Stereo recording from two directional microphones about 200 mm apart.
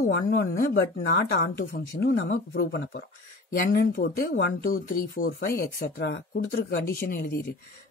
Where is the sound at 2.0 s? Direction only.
65° left (ahead or behind).